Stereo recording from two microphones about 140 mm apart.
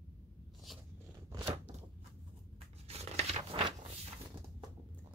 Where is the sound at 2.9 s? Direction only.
50° right (ahead or behind).